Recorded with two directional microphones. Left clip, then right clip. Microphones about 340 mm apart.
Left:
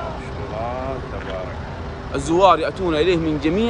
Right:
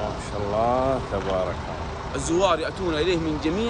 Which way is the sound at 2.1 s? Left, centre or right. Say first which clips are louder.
Left 7 dB; centre.